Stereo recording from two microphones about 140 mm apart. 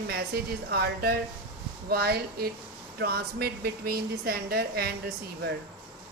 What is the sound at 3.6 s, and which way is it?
A woman's voice, 90° right.